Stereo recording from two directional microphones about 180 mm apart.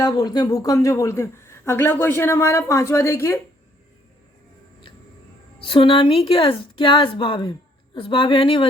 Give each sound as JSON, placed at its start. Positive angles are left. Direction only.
{"t": 0.0, "sound": "a woman's voice", "side_deg": 25}
{"t": 5.5, "sound": "a woman's voice", "side_deg": 30}